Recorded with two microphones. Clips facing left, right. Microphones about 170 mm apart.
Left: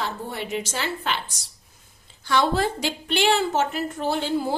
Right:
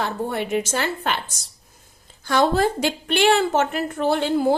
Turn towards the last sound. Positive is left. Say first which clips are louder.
# right 4 dB
turn(degrees=-60)  # may be behind; listen again after turning